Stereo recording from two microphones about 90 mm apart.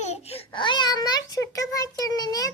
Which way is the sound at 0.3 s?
65° left (ahead or behind).